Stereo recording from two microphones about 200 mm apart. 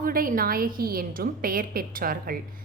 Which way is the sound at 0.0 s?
45° right (ahead or behind).